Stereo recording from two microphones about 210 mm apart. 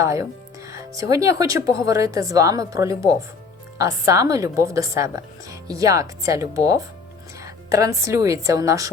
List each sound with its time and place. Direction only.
0.0 s a woman's voice: 15° right (ahead or behind)